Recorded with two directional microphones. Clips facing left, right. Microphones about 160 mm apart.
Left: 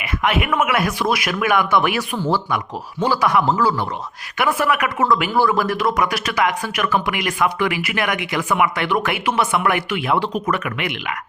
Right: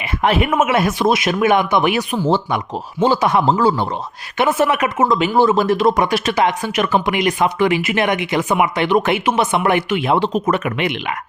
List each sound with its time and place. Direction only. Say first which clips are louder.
0.0 s speech: right 3 dB; 30° right (ahead or behind)